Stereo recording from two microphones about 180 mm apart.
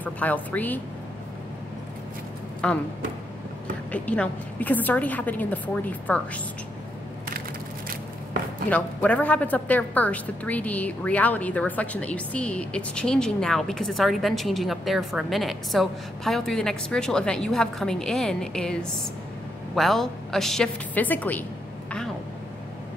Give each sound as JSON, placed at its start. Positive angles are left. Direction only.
{"t": 0.0, "sound": "a woman's voice", "side_deg": 10}
{"t": 2.6, "sound": "a woman's voice", "side_deg": 5}
{"t": 3.9, "sound": "a woman's voice", "side_deg": 10}
{"t": 8.6, "sound": "a woman's voice", "side_deg": 10}